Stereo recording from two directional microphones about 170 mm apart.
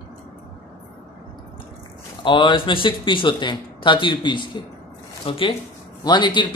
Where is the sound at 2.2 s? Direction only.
25° left (ahead or behind).